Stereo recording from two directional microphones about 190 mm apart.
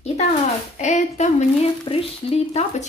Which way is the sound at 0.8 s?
40° left (ahead or behind).